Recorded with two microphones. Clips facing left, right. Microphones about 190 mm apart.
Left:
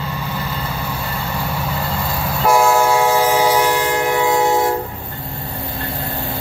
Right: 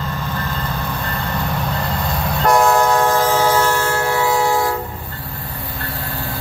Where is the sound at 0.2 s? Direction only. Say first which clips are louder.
Even; 10° left (ahead or behind).